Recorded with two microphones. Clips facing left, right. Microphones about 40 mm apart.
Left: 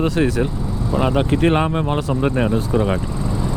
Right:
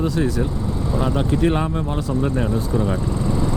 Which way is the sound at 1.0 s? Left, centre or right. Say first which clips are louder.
Left 3 dB; left.